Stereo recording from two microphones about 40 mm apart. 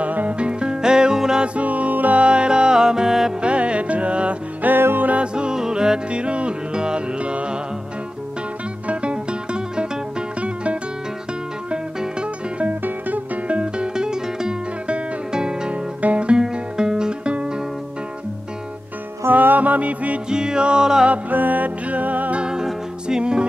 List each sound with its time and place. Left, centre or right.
0.0 s music: right; by 1.4 s centre
1.4 s music: right
2.1 s music: right
3.3 s music: right
4.7 s music: right
5.2 s music: right
8.8 s music: right
13.9 s music: centre
15.7 s music: right
19.3 s music: right
20.2 s music: centre
21.1 s music: right
22.4 s music: centre